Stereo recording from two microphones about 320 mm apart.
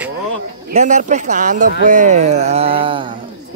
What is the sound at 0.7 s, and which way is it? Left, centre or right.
Speech, right.